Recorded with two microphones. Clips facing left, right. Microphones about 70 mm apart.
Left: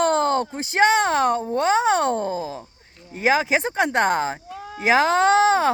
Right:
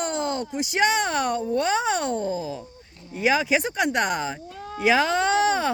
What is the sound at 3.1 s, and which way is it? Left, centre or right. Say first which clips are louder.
Speech: left 2 dB; left.